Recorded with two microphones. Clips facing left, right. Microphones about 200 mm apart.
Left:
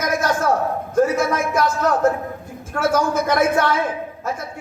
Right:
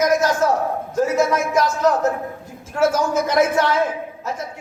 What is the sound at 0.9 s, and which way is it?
A man's voice, 55° left (ahead or behind).